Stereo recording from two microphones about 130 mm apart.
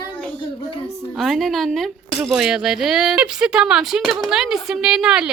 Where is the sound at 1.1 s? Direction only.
Centre (ahead or behind).